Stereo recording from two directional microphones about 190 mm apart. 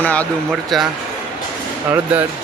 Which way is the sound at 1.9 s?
10° right (ahead or behind).